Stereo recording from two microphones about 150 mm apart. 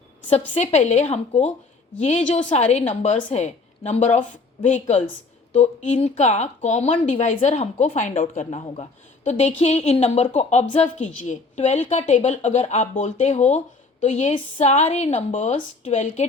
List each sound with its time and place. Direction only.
0.3 s a woman's voice: 45° left (ahead or behind)